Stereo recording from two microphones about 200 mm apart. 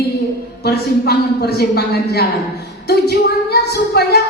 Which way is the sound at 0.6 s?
55° left (ahead or behind).